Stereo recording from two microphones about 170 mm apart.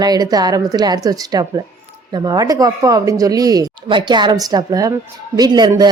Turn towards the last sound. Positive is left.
turn(degrees=-25)  # may be behind; listen again after turning